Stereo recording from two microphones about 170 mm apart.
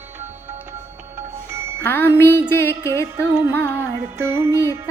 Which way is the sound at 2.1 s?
15° left (ahead or behind).